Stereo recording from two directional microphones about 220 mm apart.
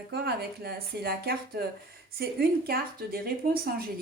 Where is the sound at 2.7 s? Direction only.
45° right (ahead or behind).